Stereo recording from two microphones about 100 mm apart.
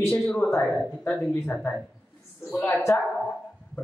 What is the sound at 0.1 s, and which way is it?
A man's voice, 10° left (ahead or behind).